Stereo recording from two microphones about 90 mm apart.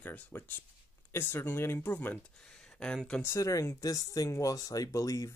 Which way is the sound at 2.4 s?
5° left (ahead or behind).